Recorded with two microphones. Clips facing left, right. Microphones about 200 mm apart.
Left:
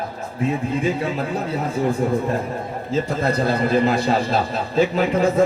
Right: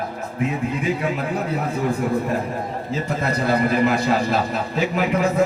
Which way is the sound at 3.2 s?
30° left (ahead or behind).